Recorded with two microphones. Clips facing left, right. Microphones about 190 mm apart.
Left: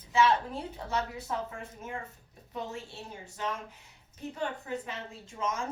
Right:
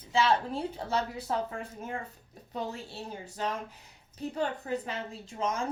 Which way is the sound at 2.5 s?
35° right (ahead or behind).